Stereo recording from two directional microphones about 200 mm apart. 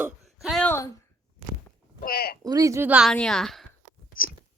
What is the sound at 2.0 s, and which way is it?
Speech, 45° left (ahead or behind).